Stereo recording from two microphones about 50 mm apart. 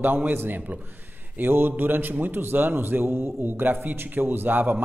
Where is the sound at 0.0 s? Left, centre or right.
Right.